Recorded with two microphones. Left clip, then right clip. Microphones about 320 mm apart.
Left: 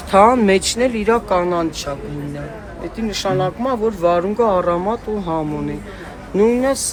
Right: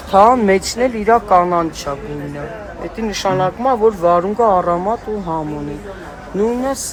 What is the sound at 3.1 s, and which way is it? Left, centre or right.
Speech, centre.